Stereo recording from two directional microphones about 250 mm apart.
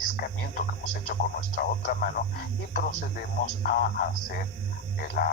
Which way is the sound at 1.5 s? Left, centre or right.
Left.